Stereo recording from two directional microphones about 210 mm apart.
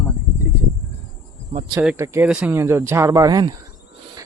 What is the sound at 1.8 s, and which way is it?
Speech, 10° right (ahead or behind).